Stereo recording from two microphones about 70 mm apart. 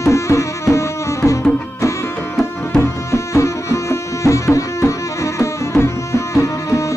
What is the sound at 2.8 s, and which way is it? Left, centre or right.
Tabla, left.